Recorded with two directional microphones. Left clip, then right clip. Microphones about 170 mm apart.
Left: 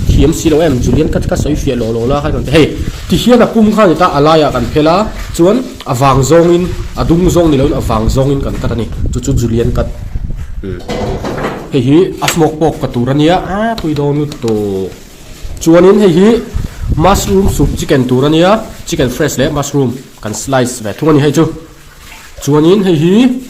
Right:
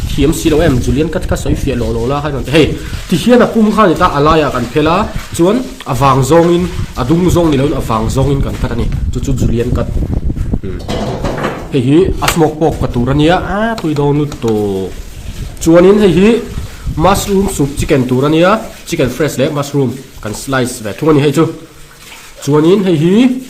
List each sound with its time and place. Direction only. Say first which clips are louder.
0.2 s a man's voice: left 1 dB; centre (ahead or behind)
9.1 s speech: left 3 dB; 15° left (ahead or behind)
11.7 s a man's voice: left 1 dB; 10° left (ahead or behind)
13.8 s speech: even; 15° right (ahead or behind)
15.6 s a man's voice: left 1 dB; centre (ahead or behind)
22.4 s speech: left 1 dB; 15° left (ahead or behind)